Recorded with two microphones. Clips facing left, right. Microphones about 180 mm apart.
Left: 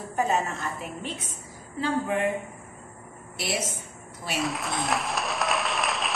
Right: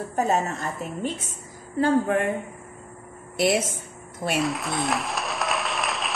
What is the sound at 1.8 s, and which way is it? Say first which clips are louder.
Speech: right 6 dB; 50° right (ahead or behind).